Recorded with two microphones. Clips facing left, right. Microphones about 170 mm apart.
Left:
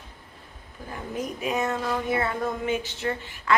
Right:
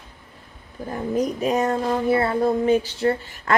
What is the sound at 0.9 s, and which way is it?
Speech, 40° right (ahead or behind).